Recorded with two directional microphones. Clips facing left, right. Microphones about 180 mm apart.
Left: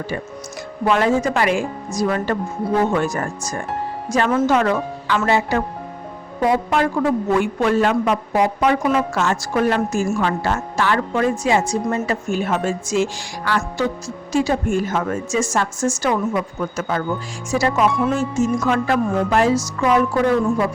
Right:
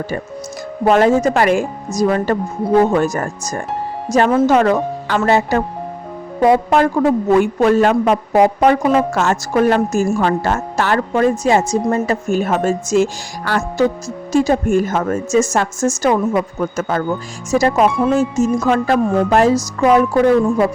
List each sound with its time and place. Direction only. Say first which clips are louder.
0.9 s a woman's voice: right 5 dB; 45° right (ahead or behind)